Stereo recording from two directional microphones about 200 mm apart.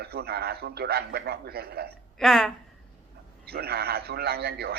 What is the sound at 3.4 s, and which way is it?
A man's voice, 50° right (ahead or behind).